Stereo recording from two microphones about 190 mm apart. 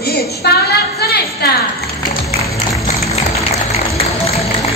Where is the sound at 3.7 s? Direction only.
35° left (ahead or behind).